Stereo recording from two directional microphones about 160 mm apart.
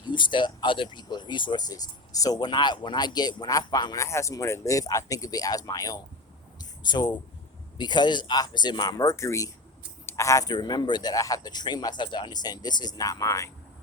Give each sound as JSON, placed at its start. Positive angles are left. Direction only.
{"t": 0.0, "sound": "speech", "side_deg": 30}
{"t": 6.6, "sound": "a sound", "side_deg": 25}
{"t": 7.8, "sound": "speech", "side_deg": 30}